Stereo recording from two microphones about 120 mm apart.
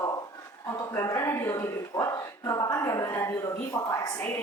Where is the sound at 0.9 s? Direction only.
25° left (ahead or behind).